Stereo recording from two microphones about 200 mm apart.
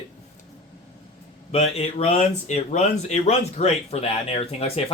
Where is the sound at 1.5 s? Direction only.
30° left (ahead or behind).